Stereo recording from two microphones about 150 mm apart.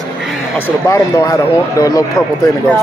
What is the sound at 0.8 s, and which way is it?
Speech, 20° left (ahead or behind).